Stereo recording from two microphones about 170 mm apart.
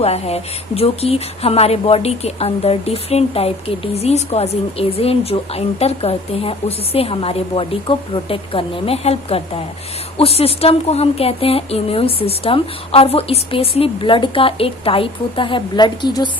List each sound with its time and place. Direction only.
0.0 s speech: 40° left (ahead or behind)